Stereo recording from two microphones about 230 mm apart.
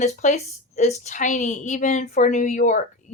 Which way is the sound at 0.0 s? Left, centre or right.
Left.